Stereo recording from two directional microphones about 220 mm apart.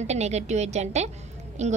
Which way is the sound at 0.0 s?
30° right (ahead or behind).